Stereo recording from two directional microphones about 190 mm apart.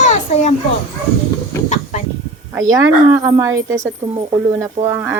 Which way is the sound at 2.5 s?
20° right (ahead or behind).